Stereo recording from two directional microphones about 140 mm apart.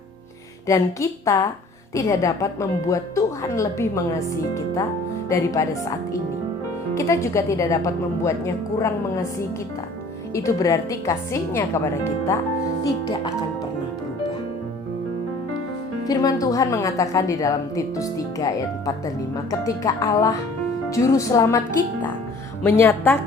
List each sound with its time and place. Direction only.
0.7 s a woman's voice: 20° left (ahead or behind)
6.9 s a woman's voice: 20° left (ahead or behind)
10.3 s a woman's voice: 20° left (ahead or behind)
12.8 s speech: 30° left (ahead or behind)
16.0 s a woman's voice: 25° left (ahead or behind)
22.6 s a woman's voice: 20° left (ahead or behind)